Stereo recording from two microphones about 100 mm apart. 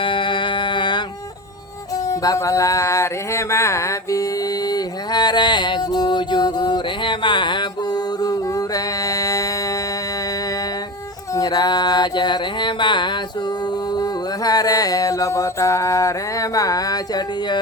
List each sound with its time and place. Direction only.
0.0 s music: 55° left (ahead or behind)
2.0 s a sound: 35° left (ahead or behind)
4.7 s music: 45° left (ahead or behind)
8.2 s a sound: 40° left (ahead or behind)
11.3 s mantra: 40° left (ahead or behind)
14.0 s music: 40° left (ahead or behind)